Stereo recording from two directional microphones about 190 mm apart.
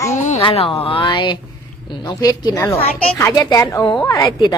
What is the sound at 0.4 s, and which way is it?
A woman's voice, 30° left (ahead or behind).